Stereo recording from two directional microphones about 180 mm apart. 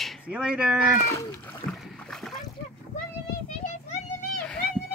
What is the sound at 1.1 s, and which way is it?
Speech, 15° left (ahead or behind).